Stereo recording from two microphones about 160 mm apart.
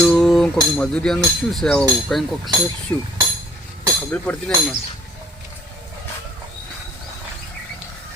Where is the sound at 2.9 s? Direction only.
15° left (ahead or behind).